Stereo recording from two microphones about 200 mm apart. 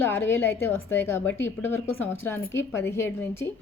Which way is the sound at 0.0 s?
10° left (ahead or behind).